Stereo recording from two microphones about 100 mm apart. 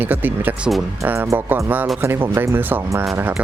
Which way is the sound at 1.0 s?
30° right (ahead or behind).